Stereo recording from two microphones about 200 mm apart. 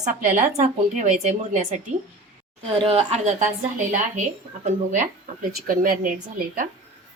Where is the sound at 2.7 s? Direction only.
30° right (ahead or behind).